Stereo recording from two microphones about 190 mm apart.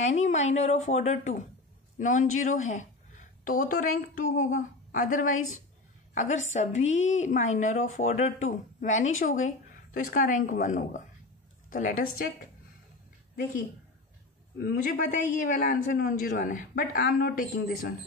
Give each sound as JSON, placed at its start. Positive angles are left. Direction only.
{"t": 0.0, "sound": "a man's voice", "side_deg": 40}
{"t": 14.6, "sound": "a man's voice", "side_deg": 50}